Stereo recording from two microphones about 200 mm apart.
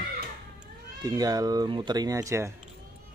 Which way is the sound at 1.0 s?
20° right (ahead or behind).